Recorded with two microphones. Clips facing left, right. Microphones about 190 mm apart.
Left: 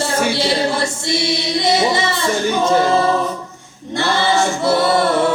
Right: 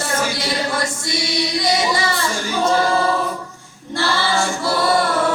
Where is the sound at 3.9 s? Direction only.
20° left (ahead or behind).